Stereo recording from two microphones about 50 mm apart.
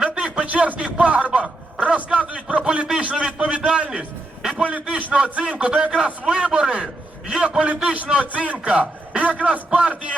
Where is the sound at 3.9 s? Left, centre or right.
Centre.